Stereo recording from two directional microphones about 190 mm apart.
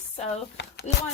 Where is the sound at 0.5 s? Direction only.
60° left (ahead or behind).